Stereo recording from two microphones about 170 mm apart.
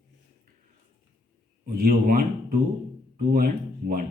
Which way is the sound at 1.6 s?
55° right (ahead or behind).